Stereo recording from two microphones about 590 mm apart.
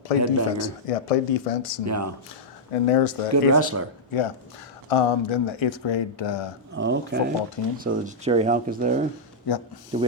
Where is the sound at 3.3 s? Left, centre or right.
Right.